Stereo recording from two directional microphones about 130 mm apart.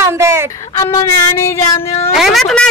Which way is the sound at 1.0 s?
20° left (ahead or behind).